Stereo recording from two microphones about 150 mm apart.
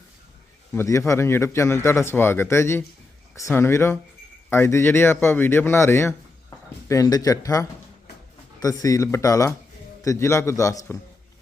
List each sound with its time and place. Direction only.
0.7 s a man's voice: 20° left (ahead or behind)